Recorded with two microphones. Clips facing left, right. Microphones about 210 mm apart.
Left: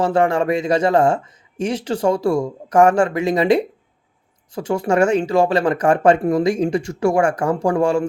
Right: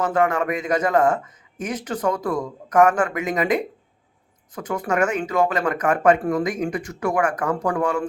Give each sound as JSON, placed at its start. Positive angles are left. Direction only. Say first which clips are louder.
{"t": 0.0, "sound": "speech", "louder": "left 4 dB", "side_deg": 30}